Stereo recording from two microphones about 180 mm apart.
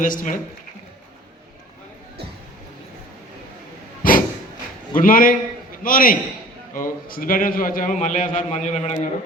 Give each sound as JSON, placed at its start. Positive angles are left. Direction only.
{"t": 0.0, "sound": "a man's voice", "side_deg": 45}
{"t": 4.0, "sound": "a sound", "side_deg": 50}
{"t": 4.9, "sound": "a man's voice", "side_deg": 50}